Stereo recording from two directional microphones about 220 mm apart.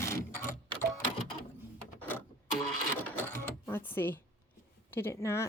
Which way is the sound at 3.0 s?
10° left (ahead or behind).